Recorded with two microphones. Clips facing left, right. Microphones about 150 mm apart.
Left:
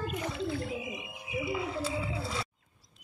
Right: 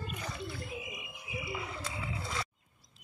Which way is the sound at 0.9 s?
30° left (ahead or behind).